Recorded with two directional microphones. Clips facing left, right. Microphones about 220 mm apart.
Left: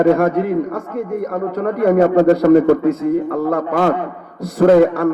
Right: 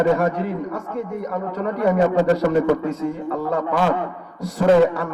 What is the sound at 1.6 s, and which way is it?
Speech, 45° left (ahead or behind).